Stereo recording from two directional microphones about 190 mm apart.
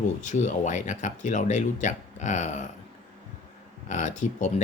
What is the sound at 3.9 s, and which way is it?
Speech, 40° left (ahead or behind).